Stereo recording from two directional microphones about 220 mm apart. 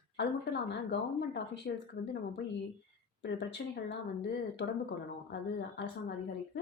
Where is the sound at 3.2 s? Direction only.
50° left (ahead or behind).